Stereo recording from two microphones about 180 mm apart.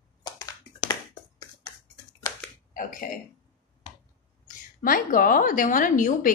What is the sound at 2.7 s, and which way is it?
Burping, 50° left (ahead or behind).